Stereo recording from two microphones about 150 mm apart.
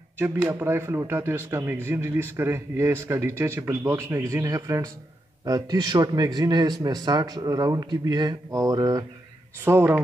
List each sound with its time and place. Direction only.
0.4 s speech: 15° right (ahead or behind)
9.7 s speech: 15° right (ahead or behind)